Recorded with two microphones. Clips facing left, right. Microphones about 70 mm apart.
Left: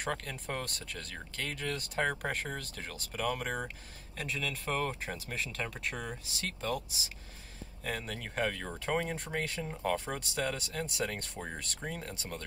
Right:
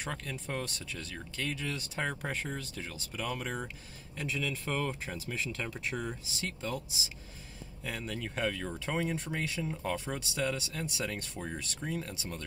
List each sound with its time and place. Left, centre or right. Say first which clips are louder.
0.0 s speech: left 2 dB; left